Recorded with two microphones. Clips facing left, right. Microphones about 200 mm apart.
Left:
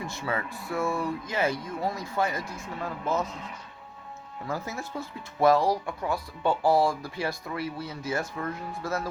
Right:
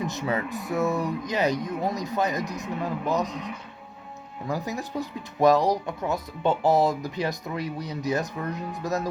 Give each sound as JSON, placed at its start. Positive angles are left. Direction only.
{"t": 0.0, "sound": "speech", "side_deg": -20}